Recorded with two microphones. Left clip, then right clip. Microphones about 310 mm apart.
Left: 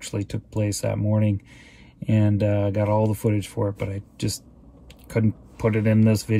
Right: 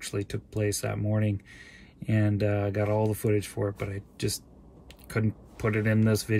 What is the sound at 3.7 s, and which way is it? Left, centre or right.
Speech, right.